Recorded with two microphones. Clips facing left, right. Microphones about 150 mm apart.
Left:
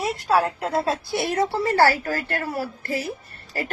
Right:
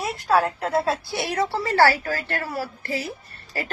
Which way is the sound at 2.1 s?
25° left (ahead or behind).